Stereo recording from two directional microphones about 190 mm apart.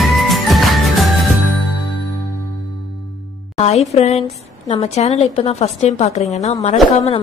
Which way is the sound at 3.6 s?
35° left (ahead or behind).